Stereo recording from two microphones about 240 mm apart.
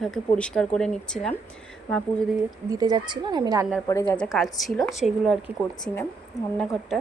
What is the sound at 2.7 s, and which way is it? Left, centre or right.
Speech, centre.